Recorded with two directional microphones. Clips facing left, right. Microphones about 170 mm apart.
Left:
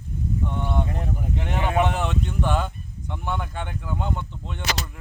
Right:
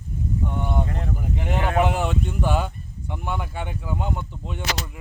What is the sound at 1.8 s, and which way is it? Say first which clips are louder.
A man's voice: right 1 dB; 5° right (ahead or behind).